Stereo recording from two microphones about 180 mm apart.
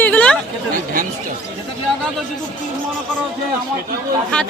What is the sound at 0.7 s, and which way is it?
Speech, 45° right (ahead or behind).